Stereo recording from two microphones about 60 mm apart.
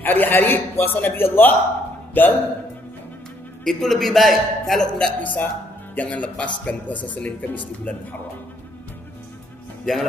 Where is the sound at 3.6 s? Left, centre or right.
Centre.